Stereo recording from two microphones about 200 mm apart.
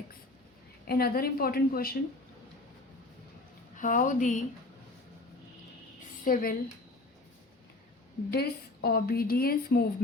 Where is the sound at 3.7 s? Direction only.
40° left (ahead or behind).